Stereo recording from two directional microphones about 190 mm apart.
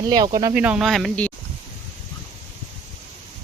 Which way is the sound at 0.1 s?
20° right (ahead or behind).